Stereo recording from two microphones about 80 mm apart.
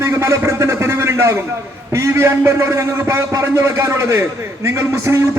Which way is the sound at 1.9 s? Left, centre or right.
Right.